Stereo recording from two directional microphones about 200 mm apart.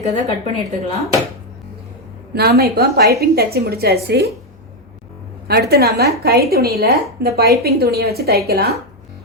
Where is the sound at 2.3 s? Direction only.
50° right (ahead or behind).